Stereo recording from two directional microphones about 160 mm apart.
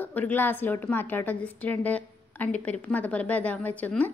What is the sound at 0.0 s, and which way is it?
A woman's voice, 10° left (ahead or behind).